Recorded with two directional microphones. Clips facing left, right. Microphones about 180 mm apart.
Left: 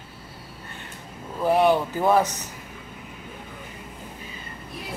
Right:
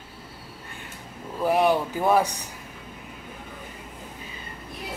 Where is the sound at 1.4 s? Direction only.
10° right (ahead or behind).